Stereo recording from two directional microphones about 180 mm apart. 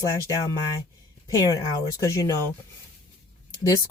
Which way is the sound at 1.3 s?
20° left (ahead or behind).